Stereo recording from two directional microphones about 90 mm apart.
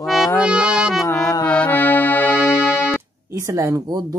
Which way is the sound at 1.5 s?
20° left (ahead or behind).